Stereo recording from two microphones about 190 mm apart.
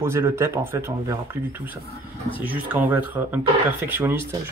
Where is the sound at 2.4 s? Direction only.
10° right (ahead or behind).